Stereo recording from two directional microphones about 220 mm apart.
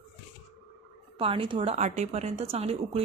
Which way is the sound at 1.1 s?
25° right (ahead or behind).